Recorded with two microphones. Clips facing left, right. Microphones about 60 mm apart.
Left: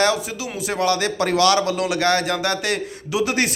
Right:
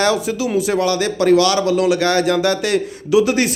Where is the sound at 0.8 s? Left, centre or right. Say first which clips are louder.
Right 3 dB; left.